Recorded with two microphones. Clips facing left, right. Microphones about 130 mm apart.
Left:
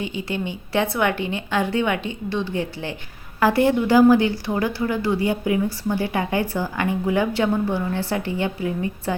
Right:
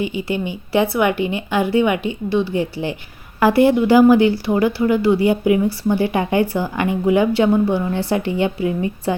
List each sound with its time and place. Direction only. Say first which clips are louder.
0.0 s speech: right 5 dB; 10° right (ahead or behind)